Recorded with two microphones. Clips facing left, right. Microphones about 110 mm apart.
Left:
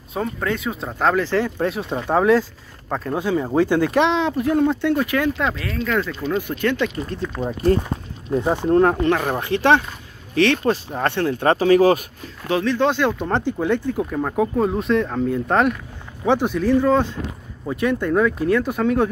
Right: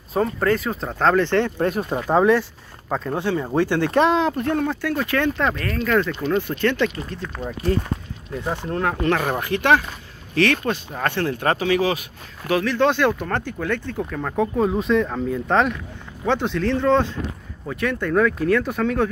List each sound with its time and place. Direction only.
0.1 s speech: centre (ahead or behind)
3.2 s speech: 10° left (ahead or behind)
3.9 s speech: centre (ahead or behind)
4.6 s speech: 20° left (ahead or behind)
5.4 s speech: centre (ahead or behind)
7.4 s speech: 25° left (ahead or behind)
9.1 s speech: 15° left (ahead or behind)
11.5 s speech: 40° left (ahead or behind)
12.4 s speech: 20° left (ahead or behind)